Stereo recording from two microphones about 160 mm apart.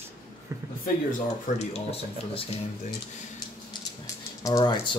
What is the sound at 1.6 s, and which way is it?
Speech, 40° left (ahead or behind).